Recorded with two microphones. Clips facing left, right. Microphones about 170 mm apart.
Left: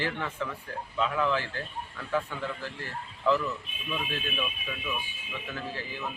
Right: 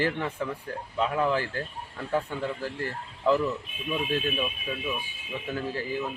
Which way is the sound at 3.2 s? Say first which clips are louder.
Right 3 dB; 40° right (ahead or behind).